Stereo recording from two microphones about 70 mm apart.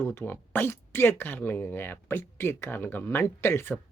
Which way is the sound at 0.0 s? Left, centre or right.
Left.